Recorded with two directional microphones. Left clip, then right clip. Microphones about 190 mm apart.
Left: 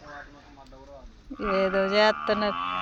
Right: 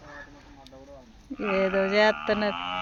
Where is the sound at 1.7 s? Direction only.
20° right (ahead or behind).